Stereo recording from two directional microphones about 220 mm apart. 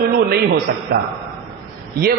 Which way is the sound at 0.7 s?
45° right (ahead or behind).